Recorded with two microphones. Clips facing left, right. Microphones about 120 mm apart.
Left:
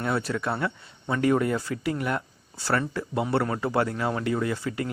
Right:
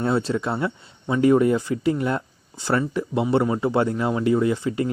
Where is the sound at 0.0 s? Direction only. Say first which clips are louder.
Right 5 dB; 25° right (ahead or behind).